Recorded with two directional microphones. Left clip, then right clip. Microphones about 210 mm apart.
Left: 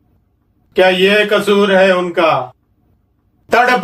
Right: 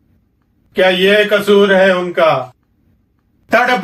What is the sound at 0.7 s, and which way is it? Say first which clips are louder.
Speech: even; 40° left (ahead or behind).